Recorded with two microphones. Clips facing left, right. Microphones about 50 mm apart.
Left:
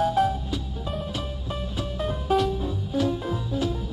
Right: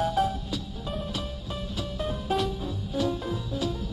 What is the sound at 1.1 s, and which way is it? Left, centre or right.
Music, centre.